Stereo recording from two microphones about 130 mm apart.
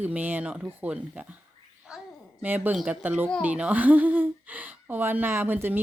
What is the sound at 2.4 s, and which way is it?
Speech, 15° right (ahead or behind).